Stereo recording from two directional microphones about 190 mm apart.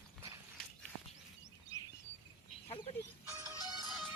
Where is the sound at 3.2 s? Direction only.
15° right (ahead or behind).